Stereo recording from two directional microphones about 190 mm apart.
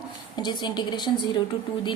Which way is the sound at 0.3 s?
20° left (ahead or behind).